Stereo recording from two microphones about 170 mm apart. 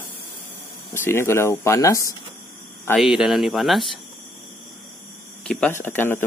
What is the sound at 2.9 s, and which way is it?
Speech, 5° right (ahead or behind).